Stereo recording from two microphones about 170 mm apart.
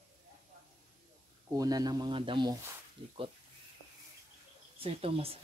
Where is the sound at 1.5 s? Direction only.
20° right (ahead or behind).